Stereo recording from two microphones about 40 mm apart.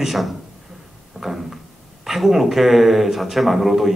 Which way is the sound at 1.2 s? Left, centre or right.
Centre.